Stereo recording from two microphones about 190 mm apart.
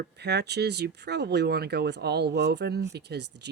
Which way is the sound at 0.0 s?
60° right (ahead or behind).